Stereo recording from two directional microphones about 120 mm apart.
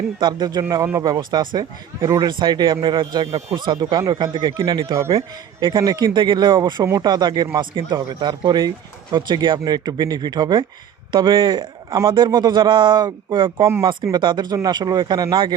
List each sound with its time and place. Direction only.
0.2 s speech: 35° right (ahead or behind)